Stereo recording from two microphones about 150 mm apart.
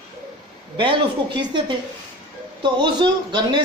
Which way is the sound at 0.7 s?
30° right (ahead or behind).